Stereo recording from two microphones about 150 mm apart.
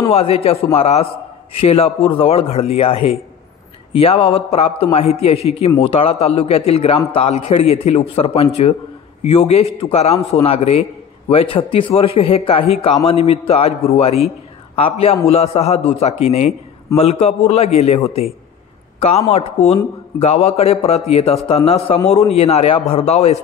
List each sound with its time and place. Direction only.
0.1 s a man's voice: 40° left (ahead or behind)